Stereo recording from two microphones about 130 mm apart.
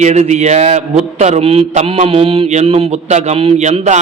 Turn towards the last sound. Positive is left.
turn(degrees=-65)  # may be behind; listen again after turning